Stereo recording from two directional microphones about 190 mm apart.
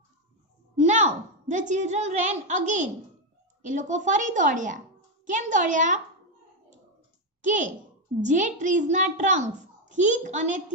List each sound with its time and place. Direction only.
1.5 s a child's voice: 40° right (ahead or behind)
7.4 s a child's voice: 40° right (ahead or behind)